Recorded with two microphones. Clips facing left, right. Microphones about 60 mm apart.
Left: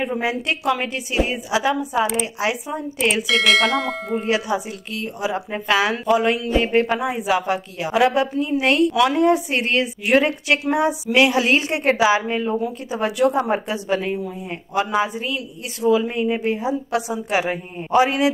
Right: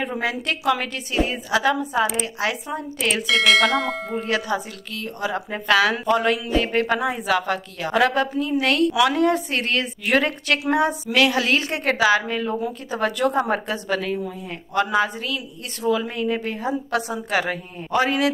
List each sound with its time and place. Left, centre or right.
0.2 s a woman's voice: centre
2.7 s speech: centre
4.2 s a woman's voice: centre
11.1 s a woman's voice: centre
12.5 s a woman's voice: centre
15.8 s a woman's voice: centre
16.1 s a woman's voice: centre